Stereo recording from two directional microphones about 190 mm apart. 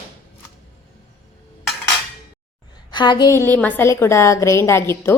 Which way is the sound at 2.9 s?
25° left (ahead or behind).